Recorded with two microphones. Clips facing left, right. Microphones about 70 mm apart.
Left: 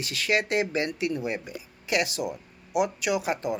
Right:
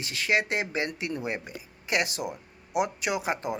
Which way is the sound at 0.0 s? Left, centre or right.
Right.